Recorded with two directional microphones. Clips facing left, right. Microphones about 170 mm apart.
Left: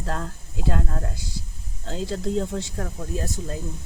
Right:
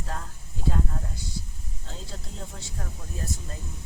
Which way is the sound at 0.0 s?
80° left.